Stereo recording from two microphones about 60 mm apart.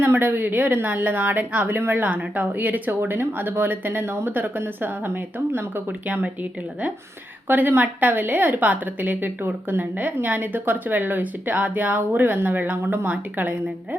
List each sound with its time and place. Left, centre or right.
0.0 s a woman's voice: right
7.4 s a woman's voice: right